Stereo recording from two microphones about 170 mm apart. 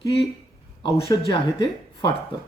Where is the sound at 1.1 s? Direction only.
25° left (ahead or behind).